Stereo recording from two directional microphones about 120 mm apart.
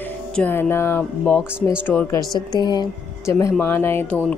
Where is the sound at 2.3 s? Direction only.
35° left (ahead or behind).